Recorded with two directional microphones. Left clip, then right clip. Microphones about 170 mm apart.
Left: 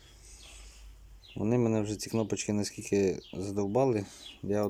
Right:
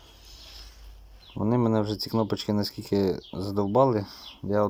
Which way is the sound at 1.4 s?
10° left (ahead or behind).